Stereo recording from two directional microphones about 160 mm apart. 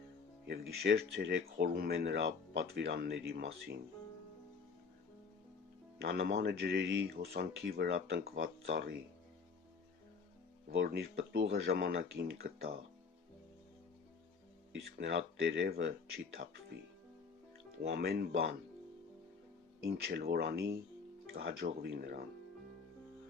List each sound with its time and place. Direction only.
0.4 s speech: 90° right
6.0 s speech: 90° right
10.7 s speech: 85° right
14.9 s speech: 90° right
17.8 s speech: 90° right
19.8 s speech: 85° right